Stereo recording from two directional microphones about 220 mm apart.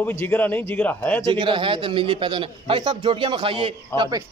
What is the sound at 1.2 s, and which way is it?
A man's voice, 20° right (ahead or behind).